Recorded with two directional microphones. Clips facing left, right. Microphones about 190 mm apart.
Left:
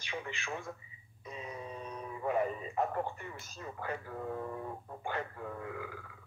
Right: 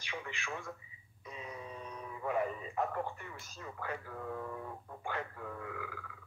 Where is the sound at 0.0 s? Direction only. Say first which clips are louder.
Left 2 dB; 25° left (ahead or behind).